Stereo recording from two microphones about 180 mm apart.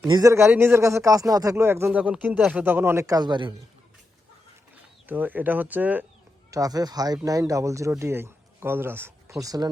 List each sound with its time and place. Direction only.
0.1 s speech: 20° right (ahead or behind)
5.0 s speech: 10° right (ahead or behind)
6.5 s speech: 20° right (ahead or behind)